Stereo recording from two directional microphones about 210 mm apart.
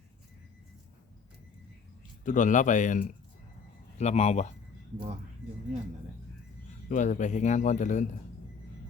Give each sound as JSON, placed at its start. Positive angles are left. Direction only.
{"t": 2.2, "sound": "speech", "side_deg": 40}
{"t": 6.8, "sound": "speech", "side_deg": 35}